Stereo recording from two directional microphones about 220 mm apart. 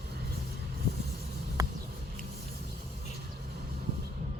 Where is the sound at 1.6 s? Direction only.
15° right (ahead or behind).